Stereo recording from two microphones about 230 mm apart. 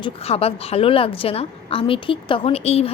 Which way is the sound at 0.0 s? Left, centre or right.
Left.